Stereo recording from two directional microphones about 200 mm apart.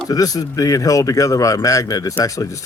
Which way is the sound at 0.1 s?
20° left (ahead or behind).